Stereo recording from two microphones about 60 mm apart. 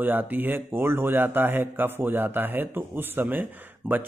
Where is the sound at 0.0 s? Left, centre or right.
Right.